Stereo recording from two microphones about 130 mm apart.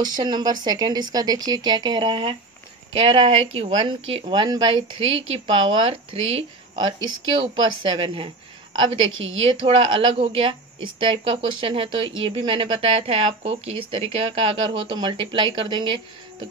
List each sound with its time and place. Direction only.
0.0 s a woman's voice: 35° right (ahead or behind)
4.3 s a woman's voice: 35° right (ahead or behind)
6.7 s speech: 35° right (ahead or behind)
9.4 s a woman's voice: 45° right (ahead or behind)